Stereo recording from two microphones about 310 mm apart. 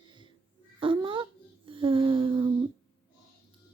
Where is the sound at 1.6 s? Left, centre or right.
Centre.